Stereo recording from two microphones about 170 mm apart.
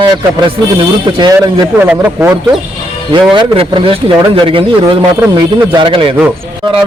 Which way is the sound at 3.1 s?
30° right (ahead or behind).